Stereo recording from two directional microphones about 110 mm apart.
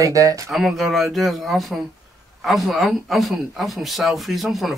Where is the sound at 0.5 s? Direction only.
Centre (ahead or behind).